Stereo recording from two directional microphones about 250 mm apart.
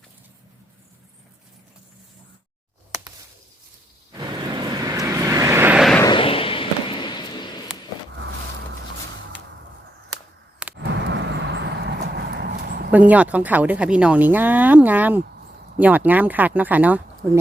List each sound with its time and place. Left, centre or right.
4.1 s vehicle: centre
6.0 s a sound: centre
10.8 s vehicle: right
12.9 s speech: centre